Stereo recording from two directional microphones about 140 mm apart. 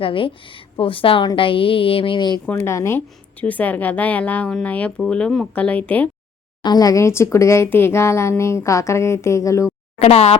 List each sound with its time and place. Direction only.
0.0 s a woman's voice: 40° left (ahead or behind)
2.5 s a woman's voice: 20° left (ahead or behind)
6.6 s speech: 30° left (ahead or behind)
10.0 s speech: 45° left (ahead or behind)